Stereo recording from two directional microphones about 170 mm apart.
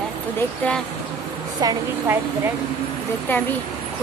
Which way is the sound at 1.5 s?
20° right (ahead or behind).